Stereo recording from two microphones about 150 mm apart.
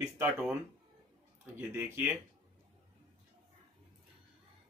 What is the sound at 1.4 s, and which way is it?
Speech, 15° right (ahead or behind).